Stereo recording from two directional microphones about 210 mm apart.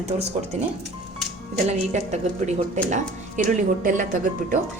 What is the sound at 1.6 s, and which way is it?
A woman's voice, 30° right (ahead or behind).